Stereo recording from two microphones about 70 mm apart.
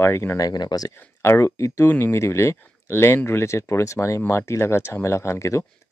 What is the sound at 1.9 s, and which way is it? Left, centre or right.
Speech, left.